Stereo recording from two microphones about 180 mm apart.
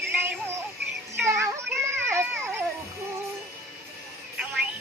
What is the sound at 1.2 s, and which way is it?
Music, 15° right (ahead or behind).